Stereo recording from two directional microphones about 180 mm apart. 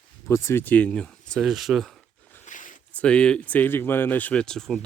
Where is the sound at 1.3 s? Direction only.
Centre (ahead or behind).